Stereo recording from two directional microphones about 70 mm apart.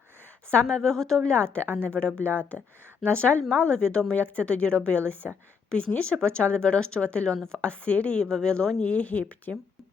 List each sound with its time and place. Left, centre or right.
0.7 s a woman's voice: centre